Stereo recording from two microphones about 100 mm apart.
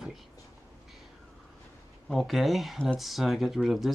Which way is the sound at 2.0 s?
Centre (ahead or behind).